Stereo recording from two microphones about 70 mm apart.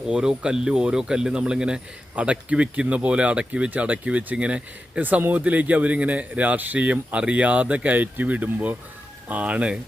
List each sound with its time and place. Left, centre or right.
0.1 s speech: centre